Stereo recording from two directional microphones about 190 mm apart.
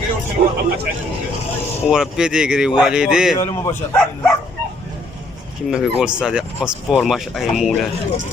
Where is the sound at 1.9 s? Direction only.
5° right (ahead or behind).